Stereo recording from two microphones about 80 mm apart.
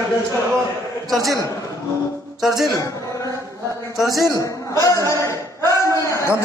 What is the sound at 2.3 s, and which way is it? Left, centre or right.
Speech, centre.